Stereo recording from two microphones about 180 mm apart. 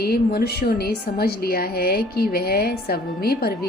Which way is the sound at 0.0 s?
60° left (ahead or behind).